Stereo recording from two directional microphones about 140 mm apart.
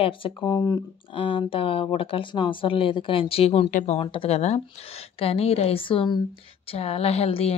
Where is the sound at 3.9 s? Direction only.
45° left (ahead or behind).